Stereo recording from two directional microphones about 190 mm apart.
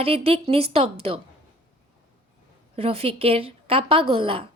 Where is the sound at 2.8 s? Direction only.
30° right (ahead or behind).